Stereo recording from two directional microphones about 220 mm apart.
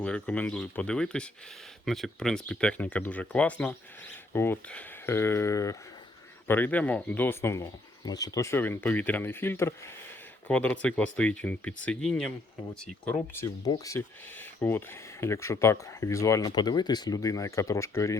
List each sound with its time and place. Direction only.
0.0 s speech: 5° left (ahead or behind)